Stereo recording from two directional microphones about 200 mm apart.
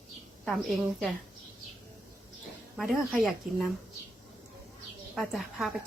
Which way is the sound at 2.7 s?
Centre (ahead or behind).